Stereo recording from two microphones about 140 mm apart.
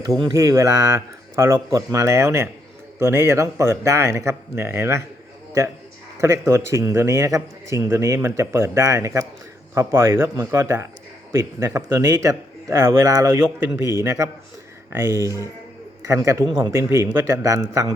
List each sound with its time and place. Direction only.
0.2 s a man's voice: 25° right (ahead or behind)
6.1 s a man's voice: 20° right (ahead or behind)